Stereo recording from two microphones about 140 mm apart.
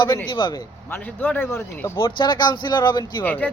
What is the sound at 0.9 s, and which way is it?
Speech, 10° left (ahead or behind).